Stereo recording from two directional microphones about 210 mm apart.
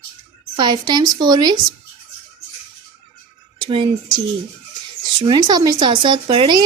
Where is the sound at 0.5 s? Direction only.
20° right (ahead or behind).